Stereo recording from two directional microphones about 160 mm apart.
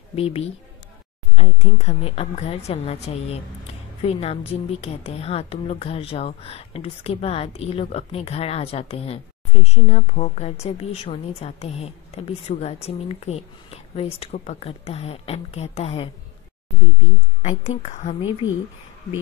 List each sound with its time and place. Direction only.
0.1 s a woman's voice: 40° left (ahead or behind)
17.4 s a woman's voice: 45° left (ahead or behind)